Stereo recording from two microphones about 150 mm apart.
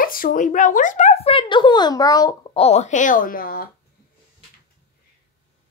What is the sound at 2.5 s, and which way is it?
A woman's voice, 45° left (ahead or behind).